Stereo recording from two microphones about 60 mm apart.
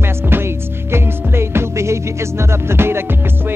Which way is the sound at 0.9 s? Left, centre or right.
Right.